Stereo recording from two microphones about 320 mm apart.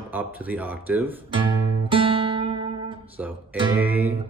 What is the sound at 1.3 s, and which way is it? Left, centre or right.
Guitar, centre.